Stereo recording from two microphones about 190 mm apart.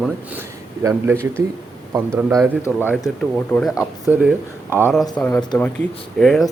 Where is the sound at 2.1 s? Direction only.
5° left (ahead or behind).